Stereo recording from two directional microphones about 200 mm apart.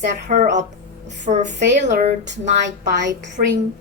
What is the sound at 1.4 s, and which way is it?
Speech, 60° right (ahead or behind).